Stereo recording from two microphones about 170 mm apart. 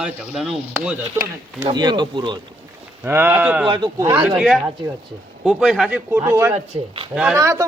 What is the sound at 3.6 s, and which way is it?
Speech, 25° right (ahead or behind).